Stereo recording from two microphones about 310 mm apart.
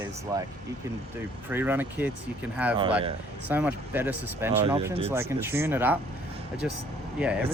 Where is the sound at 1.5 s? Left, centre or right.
Centre.